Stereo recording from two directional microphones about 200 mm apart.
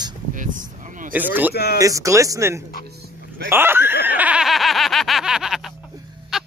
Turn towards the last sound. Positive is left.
turn(degrees=0)  # may be behind; listen again after turning